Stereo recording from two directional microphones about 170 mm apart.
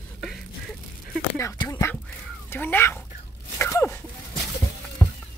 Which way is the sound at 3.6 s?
15° left (ahead or behind).